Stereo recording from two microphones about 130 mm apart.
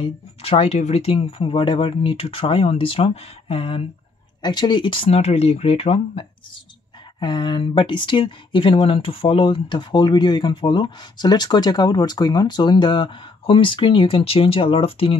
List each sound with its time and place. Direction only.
0.0 s speech: 45° left (ahead or behind)
4.4 s speech: 35° left (ahead or behind)